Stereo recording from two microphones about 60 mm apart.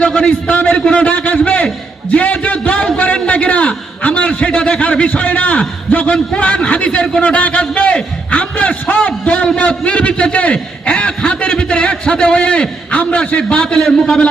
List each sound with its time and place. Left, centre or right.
0.0 s a man's voice: centre
2.1 s music: left
3.0 s a sound: left
4.5 s a man's voice: centre
7.2 s a sound: left
13.7 s a man's voice: centre